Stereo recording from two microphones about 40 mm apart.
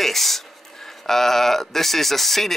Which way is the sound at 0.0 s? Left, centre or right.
Centre.